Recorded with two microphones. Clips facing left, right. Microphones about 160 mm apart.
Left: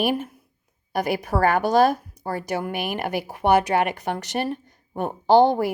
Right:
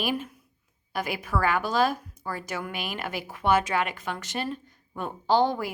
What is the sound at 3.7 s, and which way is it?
Speech, 40° left (ahead or behind).